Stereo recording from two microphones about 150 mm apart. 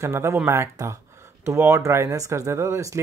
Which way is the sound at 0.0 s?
20° right (ahead or behind).